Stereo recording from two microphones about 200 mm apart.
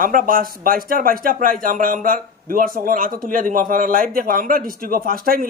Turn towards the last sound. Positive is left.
turn(degrees=-45)  # may be behind; listen again after turning